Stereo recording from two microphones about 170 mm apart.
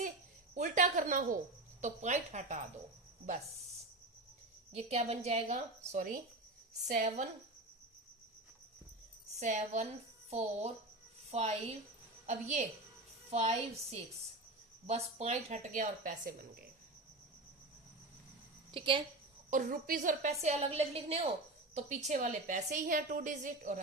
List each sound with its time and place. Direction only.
0.5 s a woman's voice: 45° right (ahead or behind)
4.7 s a woman's voice: 40° right (ahead or behind)
9.4 s a woman's voice: 45° right (ahead or behind)
18.7 s a woman's voice: 30° right (ahead or behind)
19.5 s a woman's voice: 55° right (ahead or behind)